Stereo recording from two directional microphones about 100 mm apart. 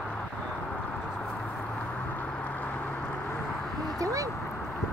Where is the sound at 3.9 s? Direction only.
35° right (ahead or behind).